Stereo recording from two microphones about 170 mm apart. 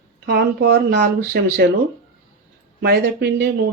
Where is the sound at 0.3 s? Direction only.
80° right.